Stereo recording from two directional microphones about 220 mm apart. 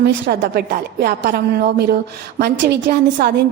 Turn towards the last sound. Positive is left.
turn(degrees=-45)  # may be behind; listen again after turning